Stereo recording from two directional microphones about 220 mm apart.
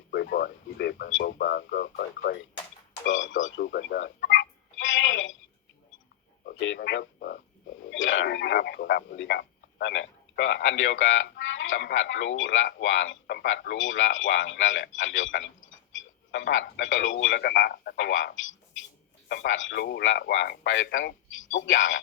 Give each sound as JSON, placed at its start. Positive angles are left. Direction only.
{"t": 0.1, "sound": "speech", "side_deg": 45}
{"t": 3.1, "sound": "speech", "side_deg": 60}
{"t": 3.6, "sound": "telephone", "side_deg": 45}
{"t": 6.4, "sound": "speech", "side_deg": 60}
{"t": 7.9, "sound": "speech", "side_deg": 60}